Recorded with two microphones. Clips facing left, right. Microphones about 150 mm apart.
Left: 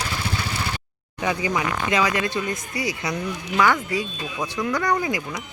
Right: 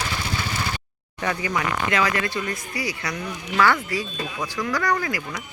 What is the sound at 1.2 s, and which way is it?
Speech, 15° left (ahead or behind).